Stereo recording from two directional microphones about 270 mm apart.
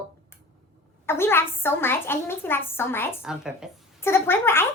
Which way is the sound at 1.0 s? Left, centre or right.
Centre.